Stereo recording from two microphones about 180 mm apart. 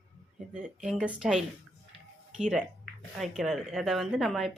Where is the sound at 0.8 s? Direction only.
5° right (ahead or behind).